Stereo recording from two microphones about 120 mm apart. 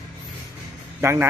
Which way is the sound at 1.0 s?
20° right (ahead or behind).